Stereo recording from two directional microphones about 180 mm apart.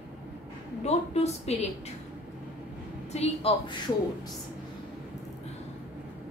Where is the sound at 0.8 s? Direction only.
35° left (ahead or behind).